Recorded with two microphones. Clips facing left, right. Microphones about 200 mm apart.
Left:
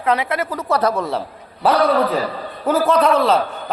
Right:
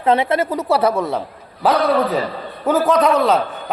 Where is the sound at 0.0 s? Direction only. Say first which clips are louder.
Right 4 dB; 25° right (ahead or behind).